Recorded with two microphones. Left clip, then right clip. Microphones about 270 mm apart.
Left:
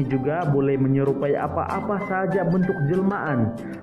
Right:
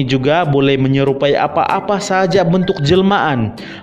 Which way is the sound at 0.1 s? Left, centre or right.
Right.